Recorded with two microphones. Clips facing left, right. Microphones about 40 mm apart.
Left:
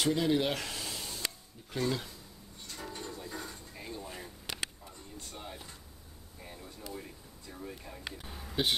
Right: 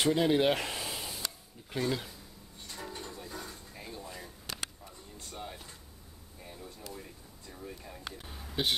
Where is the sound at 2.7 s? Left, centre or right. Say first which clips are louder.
Even; centre.